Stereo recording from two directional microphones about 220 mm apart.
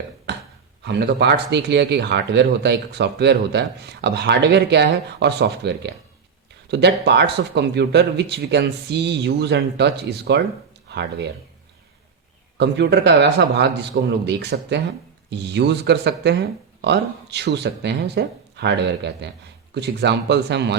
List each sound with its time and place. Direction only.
0.3 s a sound: 50° right (ahead or behind)
0.9 s speech: 50° right (ahead or behind)
12.5 s speech: 50° right (ahead or behind)